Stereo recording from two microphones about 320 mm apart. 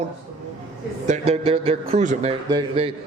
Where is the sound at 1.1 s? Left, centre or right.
Centre.